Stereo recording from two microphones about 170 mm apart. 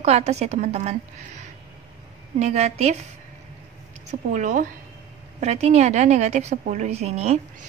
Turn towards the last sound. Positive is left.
turn(degrees=-40)  # may be behind; listen again after turning